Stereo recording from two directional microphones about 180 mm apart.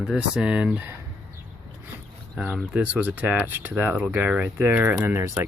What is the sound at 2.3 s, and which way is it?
Speech, 5° right (ahead or behind).